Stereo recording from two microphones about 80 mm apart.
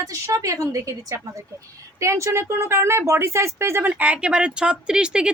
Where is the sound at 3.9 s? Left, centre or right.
Centre.